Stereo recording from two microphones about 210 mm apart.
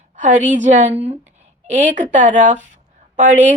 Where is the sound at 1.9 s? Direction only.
35° right (ahead or behind).